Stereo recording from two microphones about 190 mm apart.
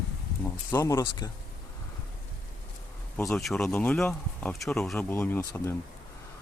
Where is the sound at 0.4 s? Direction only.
15° left (ahead or behind).